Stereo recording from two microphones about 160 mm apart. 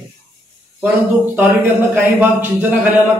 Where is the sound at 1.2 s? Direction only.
10° right (ahead or behind).